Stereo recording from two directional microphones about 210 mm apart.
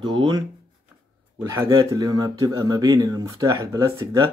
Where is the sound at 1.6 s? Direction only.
15° right (ahead or behind).